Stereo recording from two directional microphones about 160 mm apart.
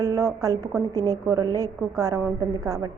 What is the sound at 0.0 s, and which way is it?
A woman's voice, 20° right (ahead or behind).